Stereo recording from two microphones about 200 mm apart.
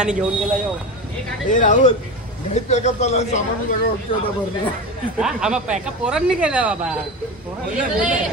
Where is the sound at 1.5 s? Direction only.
40° left (ahead or behind).